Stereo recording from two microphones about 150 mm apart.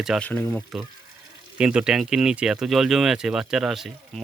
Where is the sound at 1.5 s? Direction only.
5° right (ahead or behind).